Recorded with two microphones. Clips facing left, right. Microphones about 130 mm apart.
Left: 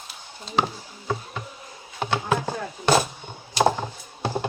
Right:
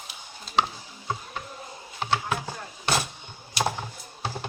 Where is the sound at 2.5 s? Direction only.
50° left (ahead or behind).